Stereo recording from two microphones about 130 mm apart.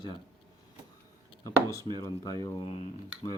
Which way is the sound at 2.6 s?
60° left (ahead or behind).